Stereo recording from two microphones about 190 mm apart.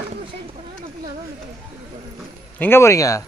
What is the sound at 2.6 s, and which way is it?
Speech, 15° left (ahead or behind).